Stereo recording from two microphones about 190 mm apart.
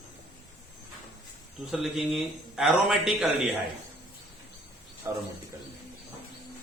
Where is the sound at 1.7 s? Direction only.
Centre (ahead or behind).